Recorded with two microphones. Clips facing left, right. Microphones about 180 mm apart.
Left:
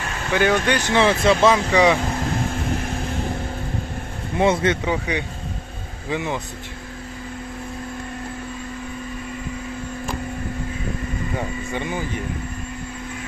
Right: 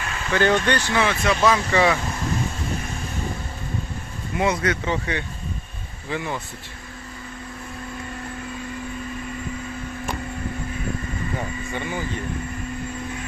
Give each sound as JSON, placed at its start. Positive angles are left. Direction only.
{"t": 0.3, "sound": "speech", "side_deg": 10}
{"t": 0.9, "sound": "speech", "side_deg": 25}
{"t": 4.4, "sound": "speech", "side_deg": 25}
{"t": 4.9, "sound": "speech", "side_deg": 15}
{"t": 11.3, "sound": "speech", "side_deg": 15}